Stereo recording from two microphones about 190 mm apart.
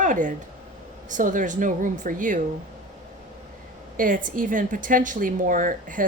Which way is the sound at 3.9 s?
45° right (ahead or behind).